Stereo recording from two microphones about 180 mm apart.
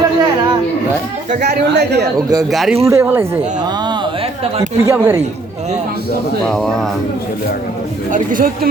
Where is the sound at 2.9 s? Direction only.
15° right (ahead or behind).